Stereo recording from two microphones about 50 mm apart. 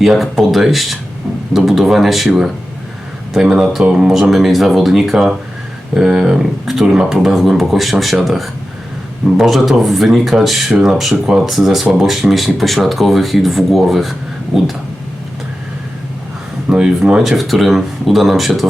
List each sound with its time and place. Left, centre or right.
0.0 s speech: centre
4.1 s speech: centre
16.6 s speech: centre
17.2 s speech: centre